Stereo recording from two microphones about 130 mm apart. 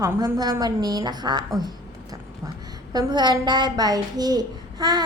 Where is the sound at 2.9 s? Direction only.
30° right (ahead or behind).